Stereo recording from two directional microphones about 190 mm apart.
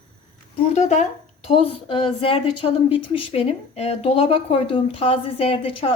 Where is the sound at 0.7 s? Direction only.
40° left (ahead or behind).